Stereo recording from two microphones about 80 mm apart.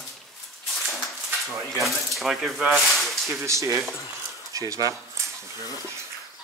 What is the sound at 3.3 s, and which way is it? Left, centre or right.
Speech, right.